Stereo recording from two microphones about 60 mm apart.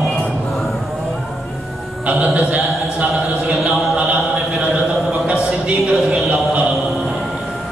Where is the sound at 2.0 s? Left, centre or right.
Right.